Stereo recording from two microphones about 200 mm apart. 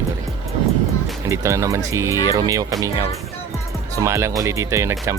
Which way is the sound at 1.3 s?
15° right (ahead or behind).